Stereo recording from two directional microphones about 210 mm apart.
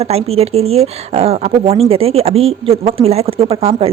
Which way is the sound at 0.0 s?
30° right (ahead or behind).